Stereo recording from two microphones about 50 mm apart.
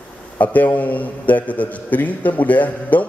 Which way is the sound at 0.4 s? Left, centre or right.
Left.